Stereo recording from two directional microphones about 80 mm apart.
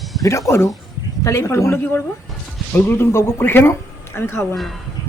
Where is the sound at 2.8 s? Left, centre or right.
Left.